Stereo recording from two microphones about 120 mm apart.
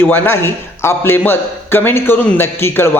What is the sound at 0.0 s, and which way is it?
A man's voice, 20° left (ahead or behind).